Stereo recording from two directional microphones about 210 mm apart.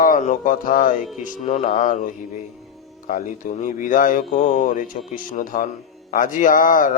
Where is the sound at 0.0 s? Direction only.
35° left (ahead or behind).